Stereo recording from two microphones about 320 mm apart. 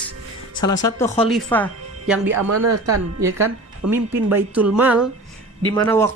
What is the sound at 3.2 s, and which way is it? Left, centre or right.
Speech, centre.